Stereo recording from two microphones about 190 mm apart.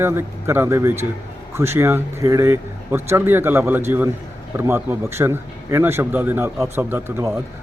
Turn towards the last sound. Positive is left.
turn(degrees=-10)  # may be behind; listen again after turning